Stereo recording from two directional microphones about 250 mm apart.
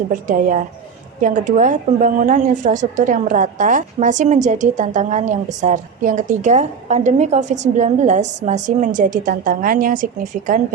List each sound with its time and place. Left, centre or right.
0.1 s a woman's voice: right